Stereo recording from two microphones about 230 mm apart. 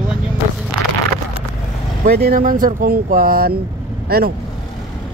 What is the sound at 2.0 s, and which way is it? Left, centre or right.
A man's voice, right.